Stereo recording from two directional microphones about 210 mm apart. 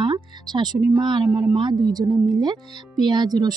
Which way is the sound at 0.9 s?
20° right (ahead or behind).